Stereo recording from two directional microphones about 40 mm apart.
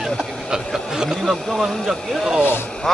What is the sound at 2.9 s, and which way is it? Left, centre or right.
Speech, centre.